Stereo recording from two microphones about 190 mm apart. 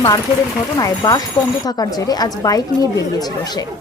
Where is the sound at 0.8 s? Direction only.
20° left (ahead or behind).